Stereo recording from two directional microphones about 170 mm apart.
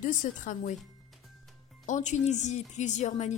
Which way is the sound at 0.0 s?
50° left (ahead or behind).